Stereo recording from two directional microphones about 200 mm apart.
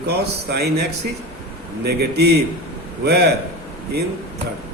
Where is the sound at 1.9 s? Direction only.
55° right (ahead or behind).